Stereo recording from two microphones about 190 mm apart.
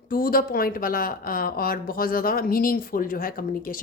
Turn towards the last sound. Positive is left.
turn(degrees=45)  # may be behind; listen again after turning